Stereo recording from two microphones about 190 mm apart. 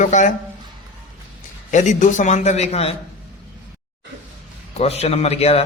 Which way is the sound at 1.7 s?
40° left (ahead or behind).